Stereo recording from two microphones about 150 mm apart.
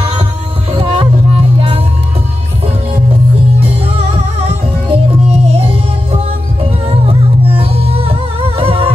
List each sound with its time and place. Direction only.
0.7 s music: 35° right (ahead or behind)
3.6 s music: 40° right (ahead or behind)